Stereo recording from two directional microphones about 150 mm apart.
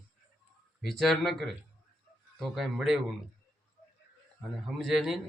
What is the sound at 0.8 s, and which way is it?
Speech, centre (ahead or behind).